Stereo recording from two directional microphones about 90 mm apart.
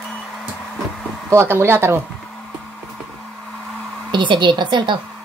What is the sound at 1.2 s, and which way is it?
Speech, 30° right (ahead or behind).